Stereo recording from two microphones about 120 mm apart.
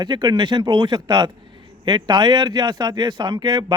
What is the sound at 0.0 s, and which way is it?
A man's voice, 35° right (ahead or behind).